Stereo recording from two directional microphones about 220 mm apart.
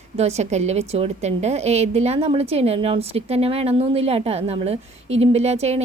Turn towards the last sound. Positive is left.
turn(degrees=-30)  # may be behind; listen again after turning